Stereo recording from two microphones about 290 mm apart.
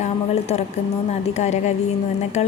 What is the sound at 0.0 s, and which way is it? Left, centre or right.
A woman's voice, left.